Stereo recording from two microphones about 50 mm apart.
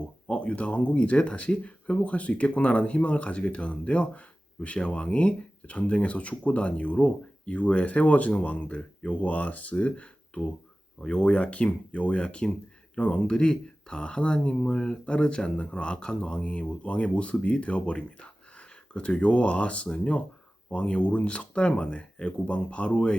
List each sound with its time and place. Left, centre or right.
0.3 s speech: left